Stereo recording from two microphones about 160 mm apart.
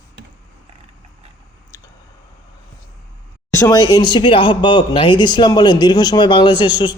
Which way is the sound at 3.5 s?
25° left (ahead or behind).